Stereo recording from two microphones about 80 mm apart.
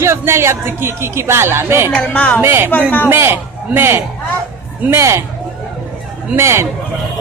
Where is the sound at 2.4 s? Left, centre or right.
Right.